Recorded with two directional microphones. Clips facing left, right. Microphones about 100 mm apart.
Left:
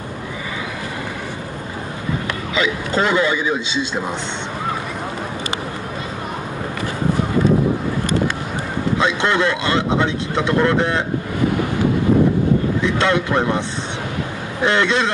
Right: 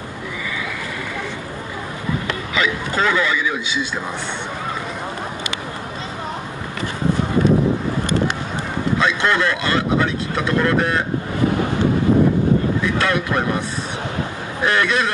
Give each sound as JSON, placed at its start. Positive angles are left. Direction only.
{"t": 2.5, "sound": "speech", "side_deg": 25}
{"t": 9.0, "sound": "speech", "side_deg": 20}
{"t": 12.8, "sound": "speech", "side_deg": 25}
{"t": 14.6, "sound": "speech", "side_deg": 25}